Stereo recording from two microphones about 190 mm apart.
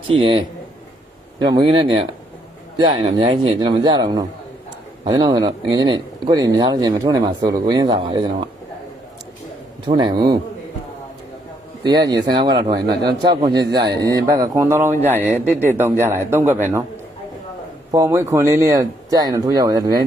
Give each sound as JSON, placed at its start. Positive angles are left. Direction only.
{"t": 0.1, "sound": "speech", "side_deg": -30}
{"t": 1.5, "sound": "speech", "side_deg": -25}
{"t": 9.8, "sound": "speech", "side_deg": -25}
{"t": 11.8, "sound": "speech", "side_deg": -20}
{"t": 17.9, "sound": "speech", "side_deg": -15}